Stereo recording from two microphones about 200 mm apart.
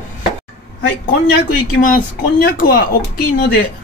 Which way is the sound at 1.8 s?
45° left (ahead or behind).